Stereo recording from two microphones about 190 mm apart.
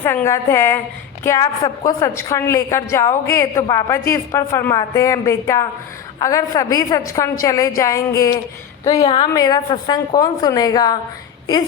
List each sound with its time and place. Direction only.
0.0 s a woman's voice: 10° left (ahead or behind)